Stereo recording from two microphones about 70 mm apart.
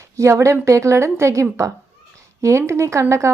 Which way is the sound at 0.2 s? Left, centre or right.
Right.